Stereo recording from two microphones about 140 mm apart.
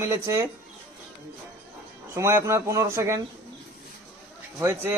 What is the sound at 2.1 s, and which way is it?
Speech, 20° right (ahead or behind).